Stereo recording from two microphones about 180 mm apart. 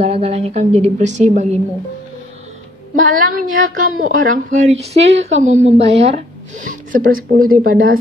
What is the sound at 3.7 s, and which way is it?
A woman's voice, 45° right (ahead or behind).